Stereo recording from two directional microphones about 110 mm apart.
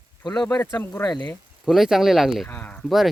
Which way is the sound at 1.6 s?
Centre (ahead or behind).